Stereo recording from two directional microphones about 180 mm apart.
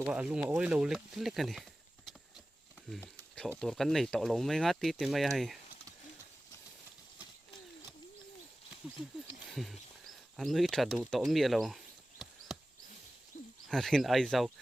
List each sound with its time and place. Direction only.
0.0 s speech: 5° right (ahead or behind)
3.6 s speech: centre (ahead or behind)
9.5 s speech: centre (ahead or behind)
13.3 s a sound: 40° left (ahead or behind)
13.7 s speech: centre (ahead or behind)